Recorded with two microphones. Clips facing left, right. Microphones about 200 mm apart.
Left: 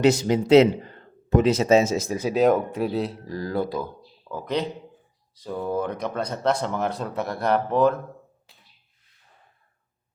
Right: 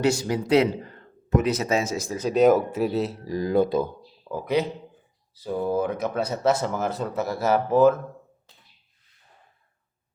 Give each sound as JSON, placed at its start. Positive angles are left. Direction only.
{"t": 0.0, "sound": "speech", "side_deg": 20}
{"t": 2.1, "sound": "speech", "side_deg": 5}
{"t": 3.2, "sound": "speech", "side_deg": -15}
{"t": 4.3, "sound": "speech", "side_deg": -10}